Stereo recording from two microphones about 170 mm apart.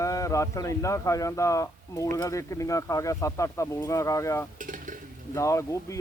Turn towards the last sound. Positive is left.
turn(degrees=20)  # may be behind; listen again after turning